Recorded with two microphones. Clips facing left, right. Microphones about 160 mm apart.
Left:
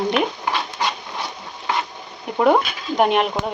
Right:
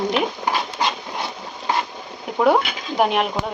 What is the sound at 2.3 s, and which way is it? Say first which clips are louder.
Speech: left 1 dB; centre (ahead or behind).